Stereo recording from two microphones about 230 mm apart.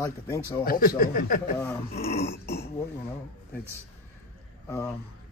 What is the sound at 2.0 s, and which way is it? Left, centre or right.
Burping, left.